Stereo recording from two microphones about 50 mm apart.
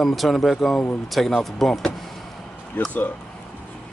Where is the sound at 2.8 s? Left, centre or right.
Left.